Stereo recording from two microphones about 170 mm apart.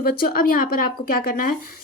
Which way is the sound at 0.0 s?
60° left (ahead or behind).